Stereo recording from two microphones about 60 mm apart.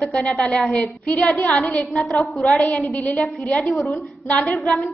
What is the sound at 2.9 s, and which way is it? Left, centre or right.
Speech, left.